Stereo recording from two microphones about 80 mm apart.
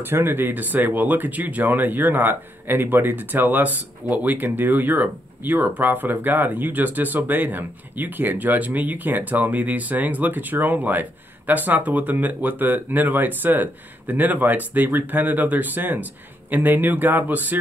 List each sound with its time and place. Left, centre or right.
0.0 s speech: right